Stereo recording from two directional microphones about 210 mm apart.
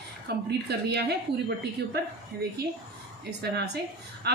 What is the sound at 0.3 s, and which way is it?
Speech, 50° right (ahead or behind).